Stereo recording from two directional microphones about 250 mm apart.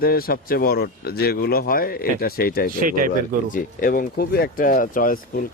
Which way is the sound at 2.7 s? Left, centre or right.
Right.